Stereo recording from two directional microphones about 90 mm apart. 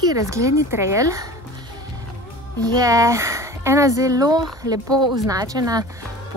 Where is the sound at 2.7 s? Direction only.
40° right (ahead or behind).